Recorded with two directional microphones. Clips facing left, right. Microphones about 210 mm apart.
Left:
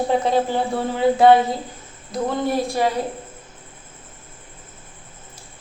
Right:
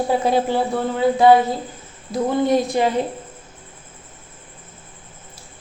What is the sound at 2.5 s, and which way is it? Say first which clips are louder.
Speech: right 4 dB; 20° right (ahead or behind).